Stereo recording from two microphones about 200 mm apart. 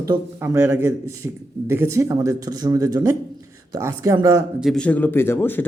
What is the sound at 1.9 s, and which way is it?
A man's voice, 15° right (ahead or behind).